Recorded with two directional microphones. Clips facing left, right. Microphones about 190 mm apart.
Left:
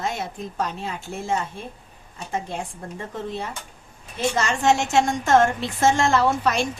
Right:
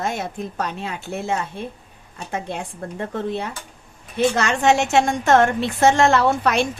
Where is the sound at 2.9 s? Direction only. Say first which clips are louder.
Right 5 dB; 65° right (ahead or behind).